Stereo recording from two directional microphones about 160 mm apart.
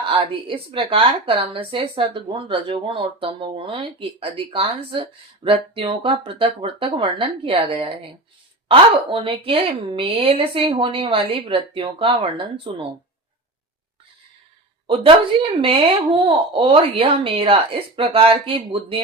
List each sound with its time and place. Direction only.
0.0 s speech: 35° right (ahead or behind)
14.8 s speech: 35° right (ahead or behind)